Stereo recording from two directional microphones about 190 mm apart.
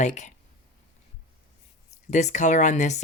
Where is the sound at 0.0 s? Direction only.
40° left (ahead or behind).